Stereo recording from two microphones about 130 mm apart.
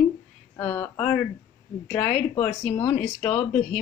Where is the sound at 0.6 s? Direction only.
15° left (ahead or behind).